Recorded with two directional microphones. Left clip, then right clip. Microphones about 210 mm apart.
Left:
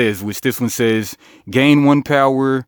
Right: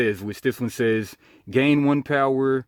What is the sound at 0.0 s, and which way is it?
Speech, 40° left (ahead or behind).